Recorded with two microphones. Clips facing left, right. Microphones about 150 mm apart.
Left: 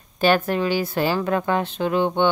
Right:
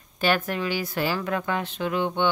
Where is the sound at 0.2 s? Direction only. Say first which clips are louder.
Left 5 dB; 30° left (ahead or behind).